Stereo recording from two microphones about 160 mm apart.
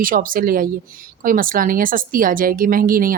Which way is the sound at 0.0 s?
60° right (ahead or behind).